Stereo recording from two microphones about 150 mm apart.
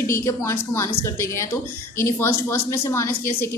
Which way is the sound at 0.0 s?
20° left (ahead or behind).